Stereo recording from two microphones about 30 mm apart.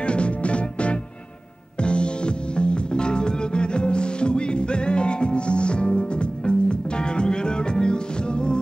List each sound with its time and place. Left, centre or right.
0.0 s music: left